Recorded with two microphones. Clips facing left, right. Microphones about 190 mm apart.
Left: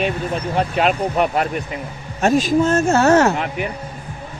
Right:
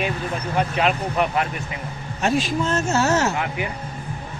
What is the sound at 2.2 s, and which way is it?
A man's voice, 45° left (ahead or behind).